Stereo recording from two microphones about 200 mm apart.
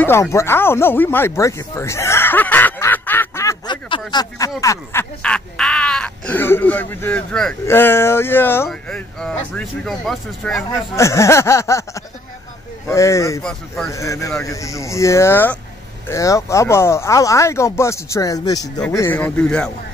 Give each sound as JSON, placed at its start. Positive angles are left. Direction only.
{"t": 0.0, "sound": "a sound", "side_deg": 15}
{"t": 4.1, "sound": "speech", "side_deg": 20}
{"t": 5.2, "sound": "speech", "side_deg": 5}
{"t": 11.0, "sound": "speech", "side_deg": 15}
{"t": 13.4, "sound": "speech", "side_deg": 5}
{"t": 13.8, "sound": "speech", "side_deg": 15}